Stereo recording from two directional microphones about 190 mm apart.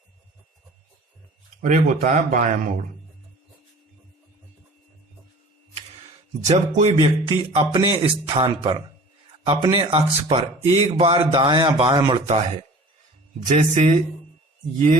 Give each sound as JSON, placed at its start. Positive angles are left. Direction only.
{"t": 1.6, "sound": "speech", "side_deg": -40}
{"t": 6.5, "sound": "speech", "side_deg": -35}
{"t": 7.0, "sound": "speech", "side_deg": -25}
{"t": 13.5, "sound": "speech", "side_deg": -35}